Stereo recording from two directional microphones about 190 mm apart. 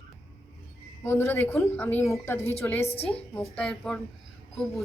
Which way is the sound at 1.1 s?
10° left (ahead or behind).